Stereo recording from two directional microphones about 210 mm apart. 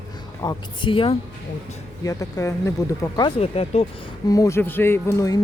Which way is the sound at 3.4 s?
30° left (ahead or behind).